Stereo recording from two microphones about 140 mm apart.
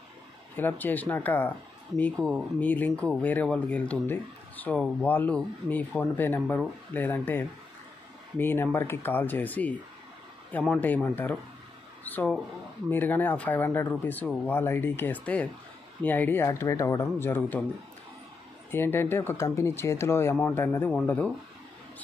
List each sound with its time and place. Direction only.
0.6 s speech: 15° left (ahead or behind)
18.7 s speech: 15° left (ahead or behind)